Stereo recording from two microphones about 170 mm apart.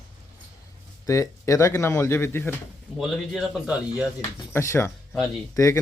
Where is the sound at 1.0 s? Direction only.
20° left (ahead or behind).